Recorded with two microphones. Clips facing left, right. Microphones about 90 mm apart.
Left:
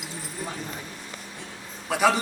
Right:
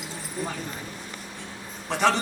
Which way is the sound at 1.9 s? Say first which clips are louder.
Left 1 dB; 5° left (ahead or behind).